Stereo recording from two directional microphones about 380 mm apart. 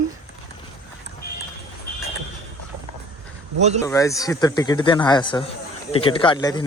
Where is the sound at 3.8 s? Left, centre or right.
Centre.